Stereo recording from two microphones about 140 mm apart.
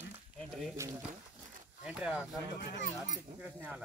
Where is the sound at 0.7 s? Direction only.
20° right (ahead or behind).